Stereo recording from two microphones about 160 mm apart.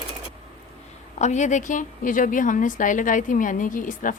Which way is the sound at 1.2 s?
50° left (ahead or behind).